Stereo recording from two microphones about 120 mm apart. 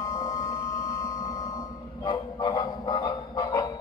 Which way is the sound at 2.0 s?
40° left (ahead or behind).